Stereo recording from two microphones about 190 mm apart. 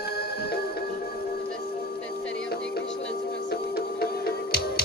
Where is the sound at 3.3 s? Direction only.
55° left (ahead or behind).